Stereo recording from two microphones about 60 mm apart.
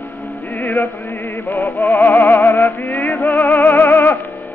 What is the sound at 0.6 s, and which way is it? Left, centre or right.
Music, left.